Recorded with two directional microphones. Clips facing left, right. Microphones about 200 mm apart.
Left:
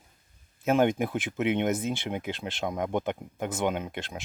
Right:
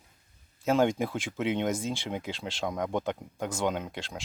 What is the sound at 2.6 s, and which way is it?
Speech, 5° left (ahead or behind).